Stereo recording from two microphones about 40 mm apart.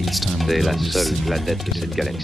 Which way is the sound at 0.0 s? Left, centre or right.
Centre.